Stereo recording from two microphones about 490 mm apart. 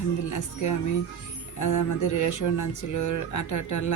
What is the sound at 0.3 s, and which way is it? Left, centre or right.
Speech, left.